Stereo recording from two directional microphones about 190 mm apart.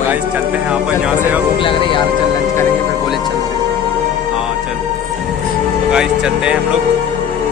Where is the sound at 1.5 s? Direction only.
25° left (ahead or behind).